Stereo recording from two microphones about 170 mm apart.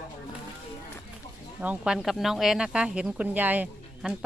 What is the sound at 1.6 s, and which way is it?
Speech, 5° right (ahead or behind).